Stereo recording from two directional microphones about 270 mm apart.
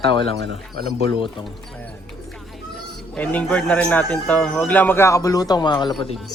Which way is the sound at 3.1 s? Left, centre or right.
Centre.